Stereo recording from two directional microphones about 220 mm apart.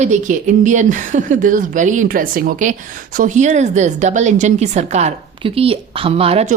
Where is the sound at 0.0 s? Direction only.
35° right (ahead or behind).